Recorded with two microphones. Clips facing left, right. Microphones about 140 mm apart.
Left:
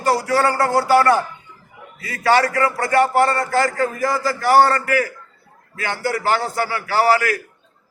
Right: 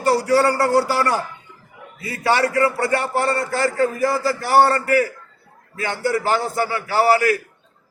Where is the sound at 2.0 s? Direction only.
30° right (ahead or behind).